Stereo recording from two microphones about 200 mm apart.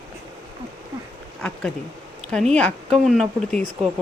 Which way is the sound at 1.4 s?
5° left (ahead or behind).